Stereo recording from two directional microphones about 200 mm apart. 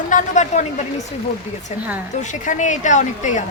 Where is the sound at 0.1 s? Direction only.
40° left (ahead or behind).